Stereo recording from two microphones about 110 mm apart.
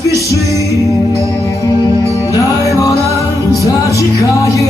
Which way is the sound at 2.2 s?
30° left (ahead or behind).